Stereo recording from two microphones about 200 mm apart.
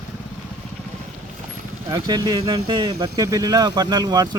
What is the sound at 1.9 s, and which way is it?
Speech, 20° right (ahead or behind).